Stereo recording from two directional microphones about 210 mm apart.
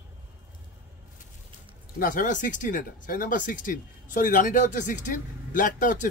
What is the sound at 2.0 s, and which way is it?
Speech, 40° left (ahead or behind).